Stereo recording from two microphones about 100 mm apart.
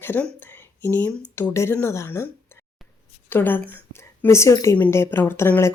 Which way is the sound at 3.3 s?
20° left (ahead or behind).